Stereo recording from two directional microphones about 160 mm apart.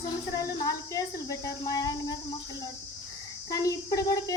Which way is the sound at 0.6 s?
20° left (ahead or behind).